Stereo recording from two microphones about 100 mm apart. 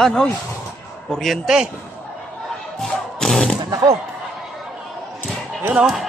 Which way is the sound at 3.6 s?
45° right (ahead or behind).